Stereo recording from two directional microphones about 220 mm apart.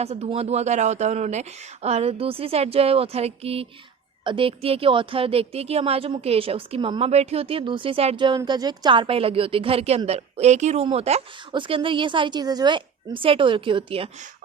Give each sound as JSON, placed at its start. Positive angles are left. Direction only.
{"t": 0.0, "sound": "a woman's voice", "side_deg": -30}